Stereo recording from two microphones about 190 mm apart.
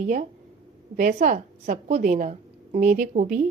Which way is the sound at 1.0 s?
40° right (ahead or behind).